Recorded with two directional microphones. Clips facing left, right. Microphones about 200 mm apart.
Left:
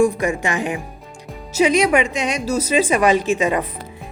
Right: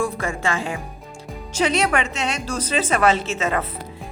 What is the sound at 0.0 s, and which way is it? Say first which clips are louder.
A woman's voice: left 7 dB; 15° left (ahead or behind).